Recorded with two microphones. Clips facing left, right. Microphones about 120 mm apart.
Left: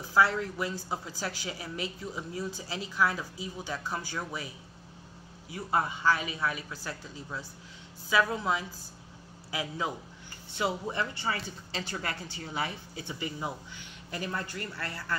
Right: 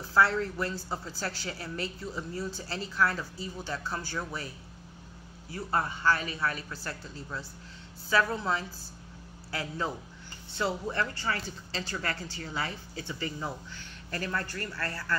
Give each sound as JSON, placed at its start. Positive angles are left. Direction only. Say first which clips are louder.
{"t": 0.1, "sound": "speech", "louder": "even", "side_deg": 10}